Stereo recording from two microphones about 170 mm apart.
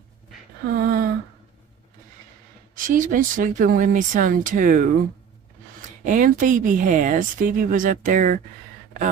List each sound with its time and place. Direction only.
0.7 s a sound: 60° right (ahead or behind)
2.7 s speech: 50° right (ahead or behind)
6.0 s speech: 50° right (ahead or behind)